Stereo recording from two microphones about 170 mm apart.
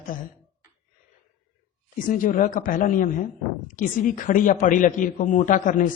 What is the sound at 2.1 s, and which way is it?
Speech, 50° left (ahead or behind).